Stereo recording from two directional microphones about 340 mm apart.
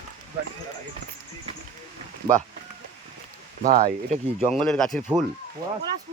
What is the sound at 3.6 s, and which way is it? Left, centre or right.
Speech, right.